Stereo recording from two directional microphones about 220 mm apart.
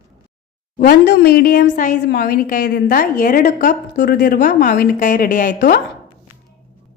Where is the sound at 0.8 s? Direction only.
45° left (ahead or behind).